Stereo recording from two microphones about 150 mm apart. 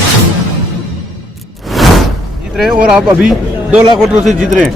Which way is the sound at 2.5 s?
5° right (ahead or behind).